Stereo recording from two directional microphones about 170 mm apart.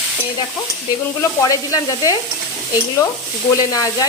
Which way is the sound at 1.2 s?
20° left (ahead or behind).